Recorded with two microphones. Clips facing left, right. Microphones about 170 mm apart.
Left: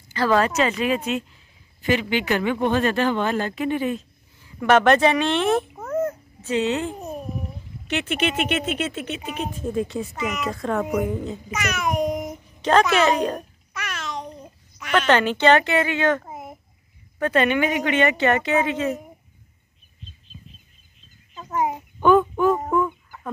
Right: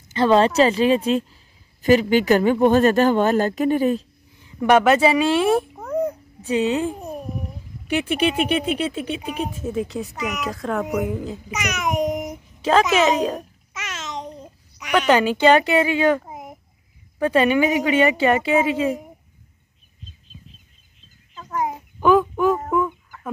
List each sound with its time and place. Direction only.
0.1 s speech: 25° right (ahead or behind); by 4.0 s 40° right (ahead or behind)
4.5 s a sound: 20° right (ahead or behind)
4.7 s a woman's voice: 10° right (ahead or behind)
5.9 s cat: 15° right (ahead or behind)
7.9 s speech: 10° right (ahead or behind)
11.5 s babbling: 15° right (ahead or behind)
12.6 s a woman's voice: 5° right (ahead or behind)
13.7 s a sound: 20° right (ahead or behind)
14.8 s a woman's voice: 15° right (ahead or behind)
21.4 s chicken: 20° left (ahead or behind)
22.0 s a sound: centre (ahead or behind)
22.7 s fowl: centre (ahead or behind)